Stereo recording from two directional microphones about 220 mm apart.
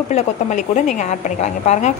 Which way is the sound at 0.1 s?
35° left (ahead or behind).